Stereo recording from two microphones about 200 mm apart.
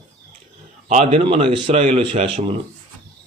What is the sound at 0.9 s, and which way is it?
Speech, 35° right (ahead or behind).